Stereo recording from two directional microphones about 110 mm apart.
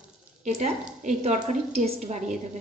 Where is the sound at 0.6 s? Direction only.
90° right.